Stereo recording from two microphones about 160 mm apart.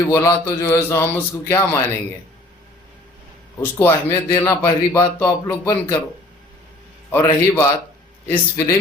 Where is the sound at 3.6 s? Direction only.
15° left (ahead or behind).